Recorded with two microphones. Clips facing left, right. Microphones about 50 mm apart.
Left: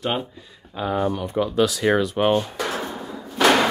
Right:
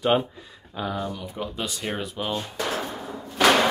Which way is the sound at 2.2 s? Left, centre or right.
Left.